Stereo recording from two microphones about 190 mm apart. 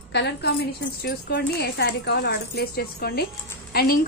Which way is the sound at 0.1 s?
65° left (ahead or behind).